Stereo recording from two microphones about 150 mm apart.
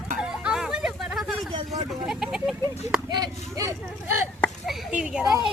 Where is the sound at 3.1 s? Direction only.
25° right (ahead or behind).